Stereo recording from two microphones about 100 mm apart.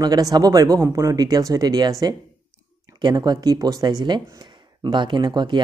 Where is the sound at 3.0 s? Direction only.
45° right (ahead or behind).